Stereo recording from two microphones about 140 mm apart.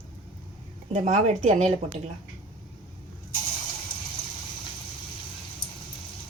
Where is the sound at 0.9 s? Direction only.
50° right (ahead or behind).